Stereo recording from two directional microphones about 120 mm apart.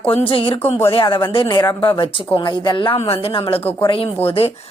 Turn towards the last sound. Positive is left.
turn(degrees=55)  # may be behind; listen again after turning